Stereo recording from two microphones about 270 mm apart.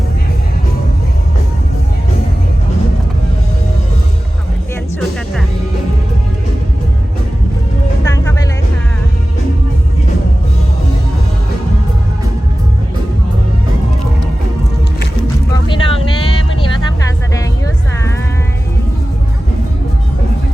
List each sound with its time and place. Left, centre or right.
4.9 s music: centre
8.0 s music: centre
15.6 s vehicle: centre